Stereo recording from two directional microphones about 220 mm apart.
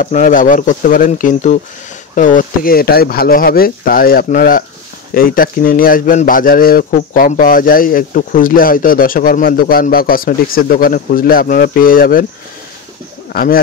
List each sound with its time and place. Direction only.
0.0 s a man's voice: 35° left (ahead or behind)
13.3 s speech: 45° left (ahead or behind)